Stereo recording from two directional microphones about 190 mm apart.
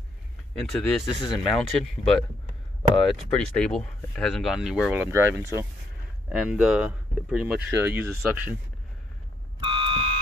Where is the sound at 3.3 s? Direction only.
5° left (ahead or behind).